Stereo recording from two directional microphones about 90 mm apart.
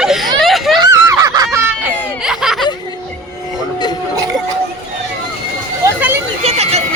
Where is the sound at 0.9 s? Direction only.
40° right (ahead or behind).